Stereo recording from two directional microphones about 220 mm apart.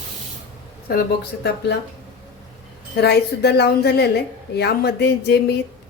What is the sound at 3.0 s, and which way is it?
A woman's voice, 50° left (ahead or behind).